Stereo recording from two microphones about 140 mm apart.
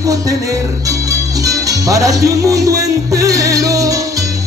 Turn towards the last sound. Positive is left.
turn(degrees=-25)  # may be behind; listen again after turning